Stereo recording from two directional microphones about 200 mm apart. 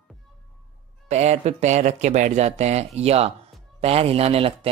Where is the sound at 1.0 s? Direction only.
35° right (ahead or behind).